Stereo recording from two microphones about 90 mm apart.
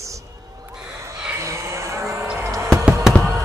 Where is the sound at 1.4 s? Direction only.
35° right (ahead or behind).